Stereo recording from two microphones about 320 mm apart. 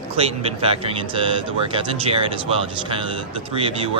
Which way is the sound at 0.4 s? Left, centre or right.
Centre.